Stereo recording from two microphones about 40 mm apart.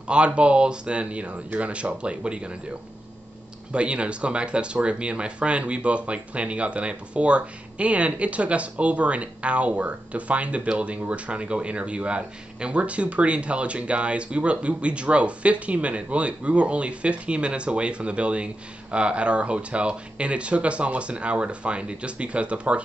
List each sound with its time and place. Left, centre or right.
0.0 s speech: right
3.7 s speech: right